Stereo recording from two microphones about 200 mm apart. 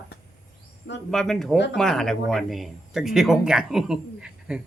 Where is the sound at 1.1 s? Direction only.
Centre (ahead or behind).